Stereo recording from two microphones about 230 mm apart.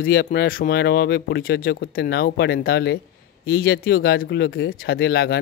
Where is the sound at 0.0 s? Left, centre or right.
Left.